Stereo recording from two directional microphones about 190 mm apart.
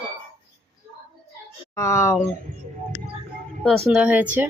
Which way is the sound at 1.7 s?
15° left (ahead or behind).